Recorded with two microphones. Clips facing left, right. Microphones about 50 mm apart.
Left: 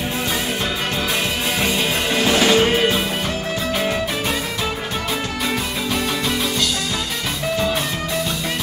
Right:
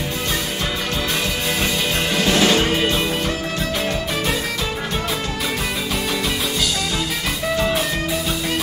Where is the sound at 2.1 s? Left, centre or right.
Centre.